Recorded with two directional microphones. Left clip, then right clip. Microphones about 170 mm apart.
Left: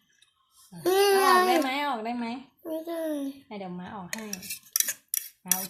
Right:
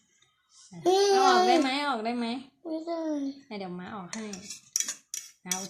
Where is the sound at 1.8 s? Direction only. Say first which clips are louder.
Even; 5° right (ahead or behind).